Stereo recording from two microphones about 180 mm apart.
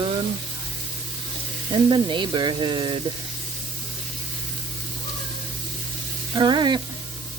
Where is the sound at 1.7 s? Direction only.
25° right (ahead or behind).